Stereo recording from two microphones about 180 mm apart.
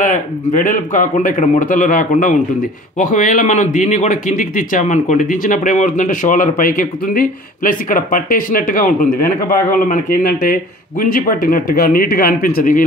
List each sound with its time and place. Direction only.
0.0 s a man's voice: 45° left (ahead or behind)